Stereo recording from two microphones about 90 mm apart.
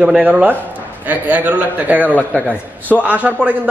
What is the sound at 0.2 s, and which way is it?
A man's voice, 15° right (ahead or behind).